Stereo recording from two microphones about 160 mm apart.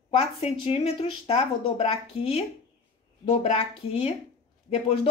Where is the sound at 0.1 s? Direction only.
40° left (ahead or behind).